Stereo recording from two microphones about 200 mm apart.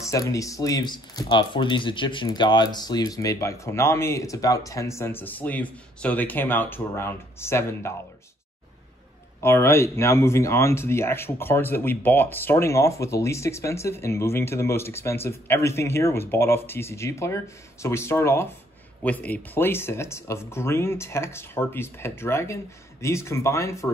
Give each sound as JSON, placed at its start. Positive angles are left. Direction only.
{"t": 0.0, "sound": "speech", "side_deg": 15}
{"t": 9.4, "sound": "speech", "side_deg": 10}